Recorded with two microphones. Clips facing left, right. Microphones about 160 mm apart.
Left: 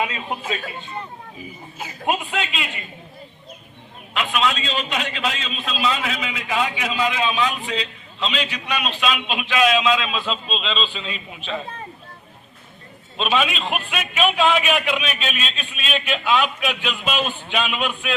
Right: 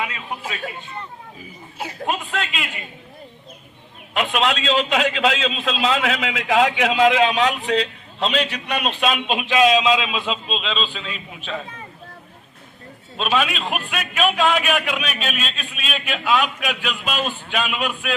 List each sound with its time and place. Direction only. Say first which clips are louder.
0.0 s a man's voice: left 3 dB; 25° left (ahead or behind)
2.3 s a man's voice: even; centre (ahead or behind)
4.1 s a man's voice: right 2 dB; 50° right (ahead or behind); by 11.1 s 5° right (ahead or behind)
13.1 s a man's voice: even; centre (ahead or behind)